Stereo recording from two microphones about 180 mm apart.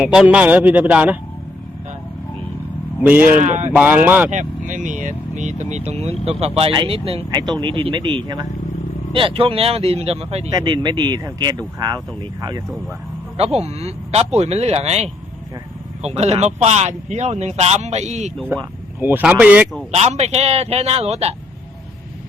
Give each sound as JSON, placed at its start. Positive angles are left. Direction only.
{"t": 0.0, "sound": "a man's voice", "side_deg": -5}
{"t": 3.1, "sound": "a man's voice", "side_deg": -10}
{"t": 3.4, "sound": "speech", "side_deg": -40}
{"t": 3.7, "sound": "a man's voice", "side_deg": -10}
{"t": 4.3, "sound": "speech", "side_deg": -45}
{"t": 7.3, "sound": "speech", "side_deg": -20}
{"t": 10.5, "sound": "speech", "side_deg": -25}
{"t": 13.3, "sound": "speech", "side_deg": -35}
{"t": 18.4, "sound": "speech", "side_deg": -10}
{"t": 19.9, "sound": "speech", "side_deg": -35}